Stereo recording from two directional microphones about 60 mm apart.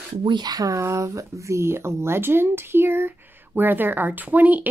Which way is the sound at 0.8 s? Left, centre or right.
Right.